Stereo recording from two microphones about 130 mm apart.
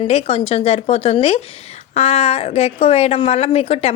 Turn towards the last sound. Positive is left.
turn(degrees=50)  # may be behind; listen again after turning